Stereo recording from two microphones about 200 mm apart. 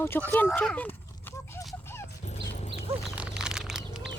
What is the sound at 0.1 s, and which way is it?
Speech, 10° left (ahead or behind).